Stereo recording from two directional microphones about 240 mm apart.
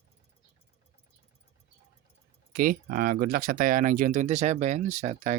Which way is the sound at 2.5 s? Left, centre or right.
Right.